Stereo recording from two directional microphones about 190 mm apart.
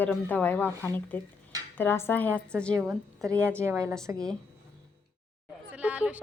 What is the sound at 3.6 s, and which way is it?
Speech, 15° right (ahead or behind).